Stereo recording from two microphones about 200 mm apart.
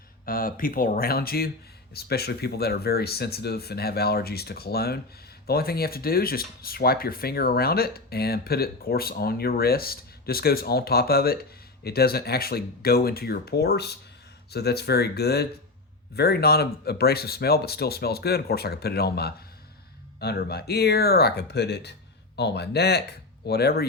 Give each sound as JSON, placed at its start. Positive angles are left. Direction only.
{"t": 0.3, "sound": "speech", "side_deg": 45}